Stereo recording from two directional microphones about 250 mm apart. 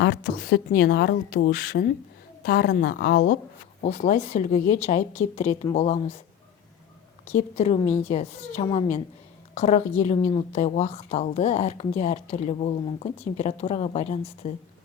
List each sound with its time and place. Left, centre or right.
0.0 s a woman's voice: left
3.8 s speech: left
7.3 s speech: left
7.8 s a woman's voice: centre
8.0 s speech: left
10.2 s a woman's voice: centre
10.5 s speech: left